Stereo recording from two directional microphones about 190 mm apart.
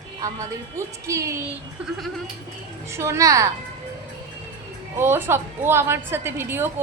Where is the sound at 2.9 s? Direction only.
15° right (ahead or behind).